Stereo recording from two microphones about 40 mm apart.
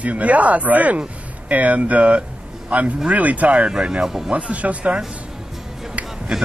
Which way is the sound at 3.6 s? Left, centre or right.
Right.